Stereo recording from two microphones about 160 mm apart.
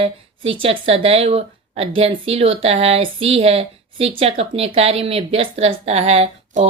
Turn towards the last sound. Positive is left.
turn(degrees=-45)  # may be behind; listen again after turning